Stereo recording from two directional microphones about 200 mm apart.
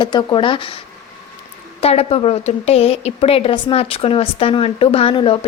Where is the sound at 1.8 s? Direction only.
30° left (ahead or behind).